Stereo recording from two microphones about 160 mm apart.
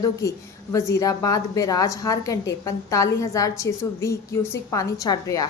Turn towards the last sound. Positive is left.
turn(degrees=25)  # may be behind; listen again after turning